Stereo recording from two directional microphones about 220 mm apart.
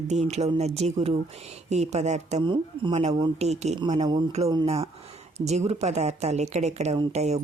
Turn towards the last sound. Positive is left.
turn(degrees=-30)  # may be behind; listen again after turning